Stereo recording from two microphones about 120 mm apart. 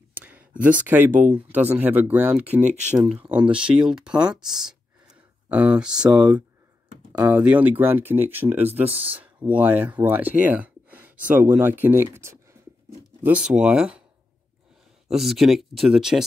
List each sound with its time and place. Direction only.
0.1 s a sound: 15° right (ahead or behind)
0.8 s speech: 15° right (ahead or behind)
5.5 s speech: 10° right (ahead or behind)
13.5 s speech: 5° right (ahead or behind)
15.0 s speech: centre (ahead or behind)